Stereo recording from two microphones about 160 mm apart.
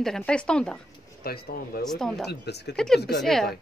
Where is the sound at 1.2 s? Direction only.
70° left (ahead or behind).